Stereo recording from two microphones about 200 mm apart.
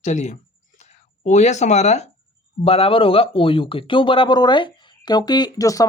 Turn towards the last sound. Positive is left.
turn(degrees=15)  # may be behind; listen again after turning